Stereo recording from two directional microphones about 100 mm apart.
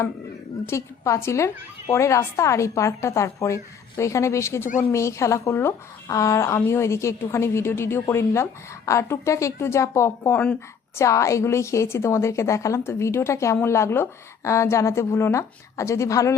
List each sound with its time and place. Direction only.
0.7 s speech: 30° left (ahead or behind)